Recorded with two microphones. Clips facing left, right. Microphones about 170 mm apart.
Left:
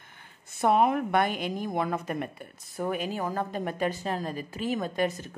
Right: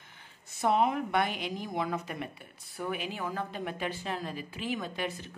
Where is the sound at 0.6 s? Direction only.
55° left (ahead or behind).